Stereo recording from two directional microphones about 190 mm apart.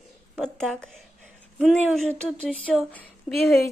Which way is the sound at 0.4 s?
5° left (ahead or behind).